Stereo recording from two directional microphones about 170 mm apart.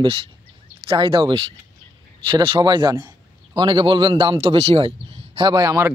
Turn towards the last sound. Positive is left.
turn(degrees=-15)  # may be behind; listen again after turning